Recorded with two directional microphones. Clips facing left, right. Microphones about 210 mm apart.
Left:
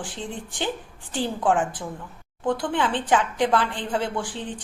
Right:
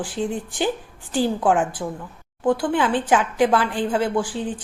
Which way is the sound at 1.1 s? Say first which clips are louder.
Right 4 dB; 5° right (ahead or behind).